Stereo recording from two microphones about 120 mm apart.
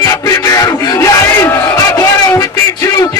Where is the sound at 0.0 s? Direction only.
30° left (ahead or behind).